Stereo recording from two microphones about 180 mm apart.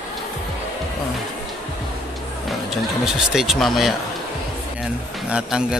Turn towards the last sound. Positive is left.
turn(degrees=-5)  # may be behind; listen again after turning